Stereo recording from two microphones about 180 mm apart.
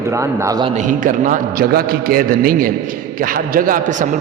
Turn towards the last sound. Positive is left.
turn(degrees=-45)  # may be behind; listen again after turning